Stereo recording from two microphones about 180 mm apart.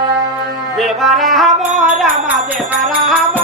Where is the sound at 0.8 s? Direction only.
Centre (ahead or behind).